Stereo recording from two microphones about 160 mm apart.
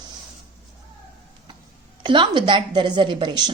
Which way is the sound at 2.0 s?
30° right (ahead or behind).